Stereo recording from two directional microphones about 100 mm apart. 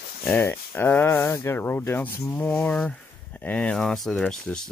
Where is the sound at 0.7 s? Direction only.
20° left (ahead or behind).